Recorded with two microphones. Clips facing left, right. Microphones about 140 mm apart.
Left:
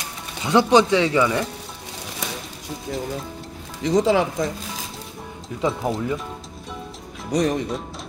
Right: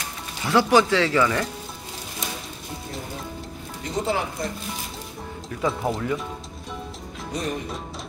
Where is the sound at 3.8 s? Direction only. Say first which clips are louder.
Left 8 dB; 90° left.